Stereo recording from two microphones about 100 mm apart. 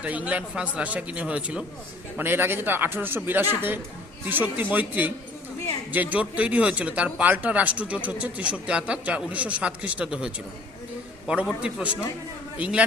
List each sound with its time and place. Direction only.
0.0 s a man's voice: 15° right (ahead or behind)
11.4 s speech: 10° right (ahead or behind)